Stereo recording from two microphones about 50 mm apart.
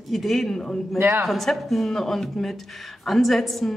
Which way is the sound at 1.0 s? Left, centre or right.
Right.